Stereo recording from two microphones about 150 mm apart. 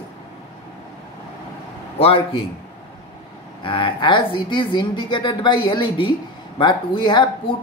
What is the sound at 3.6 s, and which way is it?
Speech, 35° left (ahead or behind).